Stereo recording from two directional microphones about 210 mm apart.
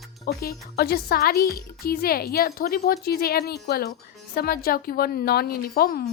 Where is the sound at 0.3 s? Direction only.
45° left (ahead or behind).